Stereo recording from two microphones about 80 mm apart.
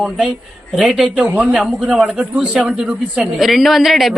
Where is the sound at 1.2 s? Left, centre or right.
Centre.